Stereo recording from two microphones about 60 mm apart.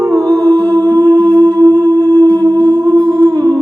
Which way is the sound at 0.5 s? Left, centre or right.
Left.